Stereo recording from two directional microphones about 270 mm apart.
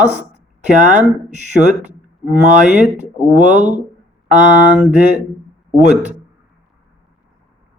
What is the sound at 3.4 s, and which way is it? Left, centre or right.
Speech, right.